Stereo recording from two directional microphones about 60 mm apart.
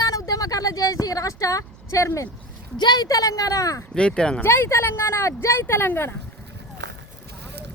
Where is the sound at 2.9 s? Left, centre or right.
Left.